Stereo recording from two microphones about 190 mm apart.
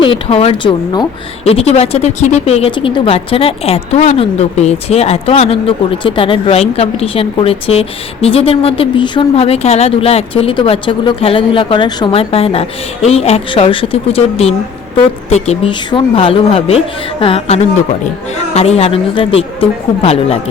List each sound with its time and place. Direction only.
0.0 s a woman's voice: 30° left (ahead or behind)